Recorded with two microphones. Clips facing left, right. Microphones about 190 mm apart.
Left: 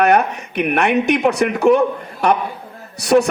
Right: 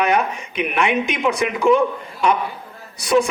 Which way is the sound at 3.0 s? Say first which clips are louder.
Left 3 dB; 65° left (ahead or behind).